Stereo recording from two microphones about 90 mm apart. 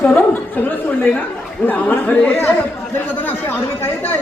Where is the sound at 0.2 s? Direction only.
20° left (ahead or behind).